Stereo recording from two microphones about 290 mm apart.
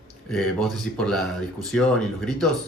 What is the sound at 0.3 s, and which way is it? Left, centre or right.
Speech, centre.